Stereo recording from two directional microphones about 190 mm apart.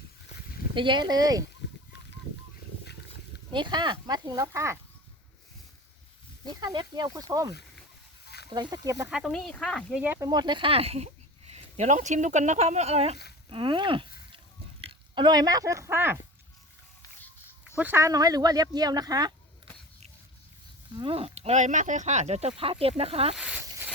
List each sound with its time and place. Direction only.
0.7 s speech: 25° right (ahead or behind)
3.5 s speech: 25° right (ahead or behind)
6.5 s speech: 20° right (ahead or behind)
9.0 s speech: centre (ahead or behind)
10.0 s speech: 10° right (ahead or behind)
10.2 s speech: 25° right (ahead or behind)
14.3 s a sound: 30° right (ahead or behind); by 16.1 s 10° right (ahead or behind)
17.7 s speech: 10° right (ahead or behind)
20.9 s speech: 25° right (ahead or behind)
23.3 s speech: 5° right (ahead or behind)